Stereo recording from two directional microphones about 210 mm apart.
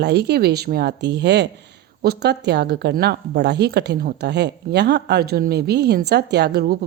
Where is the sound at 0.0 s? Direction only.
50° right (ahead or behind).